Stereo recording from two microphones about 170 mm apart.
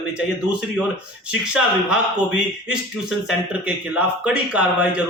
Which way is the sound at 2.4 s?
5° right (ahead or behind).